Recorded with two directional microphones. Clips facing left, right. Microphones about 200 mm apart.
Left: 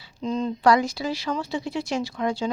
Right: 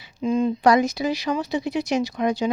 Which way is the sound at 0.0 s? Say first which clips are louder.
Right 5 dB; 10° right (ahead or behind).